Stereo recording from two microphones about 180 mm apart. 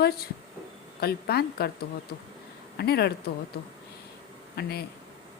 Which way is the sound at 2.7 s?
65° left (ahead or behind).